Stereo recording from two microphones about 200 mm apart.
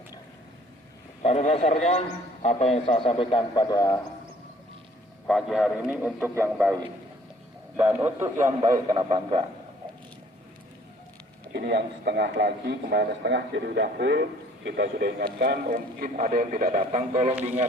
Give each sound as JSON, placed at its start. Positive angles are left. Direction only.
{"t": 1.2, "sound": "a man's voice", "side_deg": 35}
{"t": 5.3, "sound": "a man's voice", "side_deg": 0}
{"t": 11.5, "sound": "a man's voice", "side_deg": -55}